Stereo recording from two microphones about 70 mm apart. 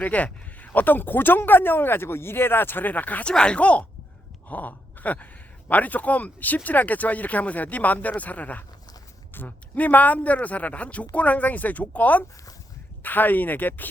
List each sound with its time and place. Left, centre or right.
0.0 s a man's voice: left